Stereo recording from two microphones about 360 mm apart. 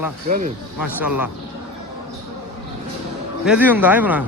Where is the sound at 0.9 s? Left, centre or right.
Centre.